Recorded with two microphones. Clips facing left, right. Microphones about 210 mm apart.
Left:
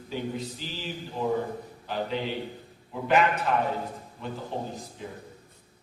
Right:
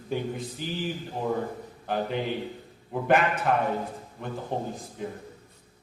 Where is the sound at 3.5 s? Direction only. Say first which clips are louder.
Right 2 dB; 55° right (ahead or behind).